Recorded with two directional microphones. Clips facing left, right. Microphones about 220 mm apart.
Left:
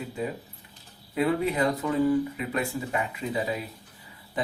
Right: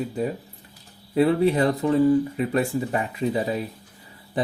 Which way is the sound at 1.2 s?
35° right (ahead or behind).